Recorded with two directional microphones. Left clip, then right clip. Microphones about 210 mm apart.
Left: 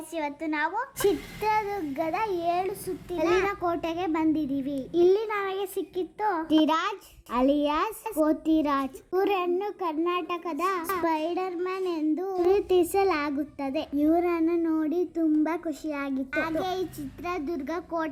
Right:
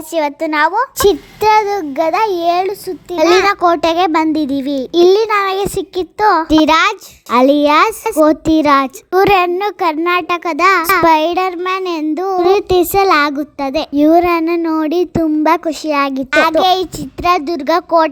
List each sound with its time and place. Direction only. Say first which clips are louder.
0.1 s a child's voice: right 16 dB; 30° right (ahead or behind)